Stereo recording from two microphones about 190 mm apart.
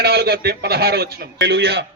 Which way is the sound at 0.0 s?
60° right (ahead or behind).